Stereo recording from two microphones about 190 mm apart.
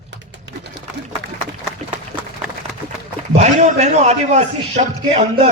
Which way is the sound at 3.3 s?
35° right (ahead or behind).